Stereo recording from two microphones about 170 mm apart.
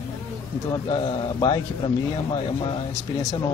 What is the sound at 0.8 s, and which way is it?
Speech, 30° left (ahead or behind).